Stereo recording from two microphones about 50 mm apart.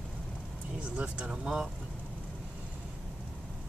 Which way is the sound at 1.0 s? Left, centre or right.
Right.